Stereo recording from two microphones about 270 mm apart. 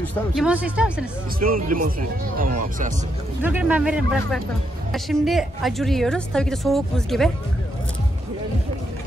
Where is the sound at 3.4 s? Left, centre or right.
Centre.